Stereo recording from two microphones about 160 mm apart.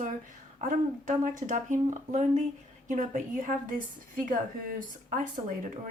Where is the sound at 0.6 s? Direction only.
55° right (ahead or behind).